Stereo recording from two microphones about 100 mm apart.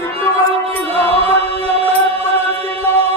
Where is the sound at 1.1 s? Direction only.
80° right.